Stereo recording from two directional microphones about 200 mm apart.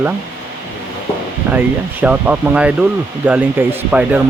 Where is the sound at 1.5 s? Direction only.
10° right (ahead or behind).